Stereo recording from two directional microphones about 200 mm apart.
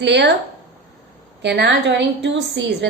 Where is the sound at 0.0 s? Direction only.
60° right (ahead or behind).